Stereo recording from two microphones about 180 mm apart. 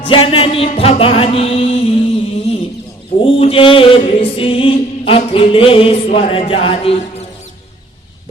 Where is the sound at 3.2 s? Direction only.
30° left (ahead or behind).